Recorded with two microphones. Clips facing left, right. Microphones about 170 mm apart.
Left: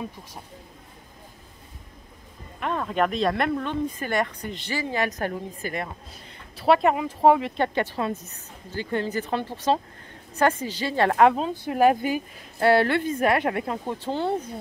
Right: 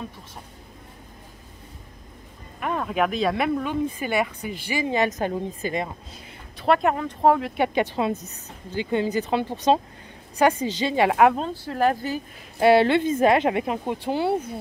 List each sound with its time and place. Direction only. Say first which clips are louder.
2.6 s speech: right 1 dB; 5° right (ahead or behind)
6.2 s speech: left 1 dB; centre (ahead or behind)
7.5 s a woman's voice: right 2 dB; 15° right (ahead or behind)
11.1 s speech: left 1 dB; 5° right (ahead or behind)
11.5 s speech: left 3 dB; 15° left (ahead or behind)
12.5 s speech: right 3 dB; 15° right (ahead or behind)